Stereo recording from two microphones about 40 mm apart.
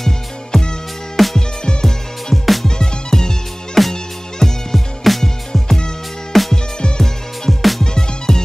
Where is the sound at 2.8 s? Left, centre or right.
Centre.